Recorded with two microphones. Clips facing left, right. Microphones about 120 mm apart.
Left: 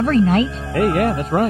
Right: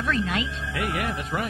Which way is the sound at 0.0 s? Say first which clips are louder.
Left 11 dB; 40° left (ahead or behind).